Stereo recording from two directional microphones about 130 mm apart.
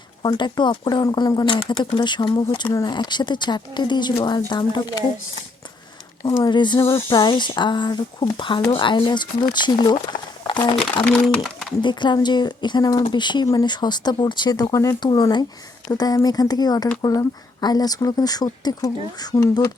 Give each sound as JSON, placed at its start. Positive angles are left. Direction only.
{"t": 0.2, "sound": "speech", "side_deg": 35}
{"t": 1.5, "sound": "speech", "side_deg": 45}
{"t": 6.4, "sound": "speech", "side_deg": 35}
{"t": 11.0, "sound": "speech", "side_deg": 5}
{"t": 11.8, "sound": "speech", "side_deg": 35}